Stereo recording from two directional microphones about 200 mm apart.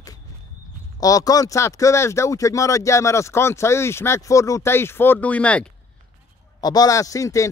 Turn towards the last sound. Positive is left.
turn(degrees=15)  # may be behind; listen again after turning